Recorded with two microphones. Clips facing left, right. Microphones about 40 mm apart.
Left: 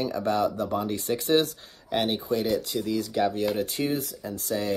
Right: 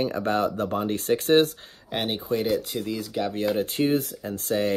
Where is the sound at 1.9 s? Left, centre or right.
Centre.